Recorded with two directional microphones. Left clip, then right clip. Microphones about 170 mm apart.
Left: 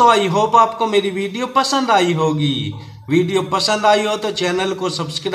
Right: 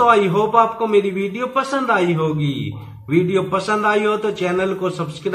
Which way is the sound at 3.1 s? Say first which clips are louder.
Left 1 dB; 55° left (ahead or behind).